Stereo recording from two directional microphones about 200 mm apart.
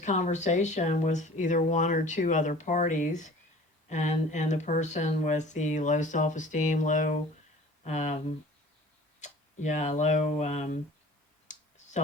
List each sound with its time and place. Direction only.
0.0 s speech: 35° left (ahead or behind)
9.2 s speech: 35° left (ahead or behind)
11.4 s clicking: 35° left (ahead or behind)